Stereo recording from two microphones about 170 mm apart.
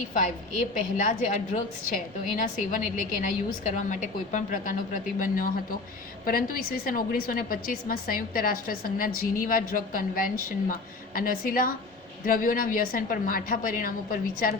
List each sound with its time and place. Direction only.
0.7 s a woman's voice: 50° left (ahead or behind)